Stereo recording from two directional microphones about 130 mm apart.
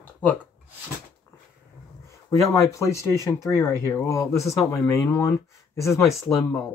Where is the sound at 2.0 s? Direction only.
25° left (ahead or behind).